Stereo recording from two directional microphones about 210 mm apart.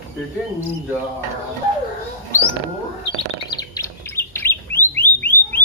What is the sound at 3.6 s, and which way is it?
Bird, 15° left (ahead or behind).